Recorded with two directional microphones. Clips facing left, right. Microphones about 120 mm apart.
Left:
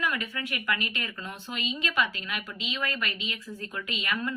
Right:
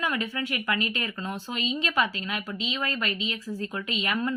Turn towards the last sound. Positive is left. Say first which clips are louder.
# right 4 dB
turn(degrees=-30)  # may be behind; listen again after turning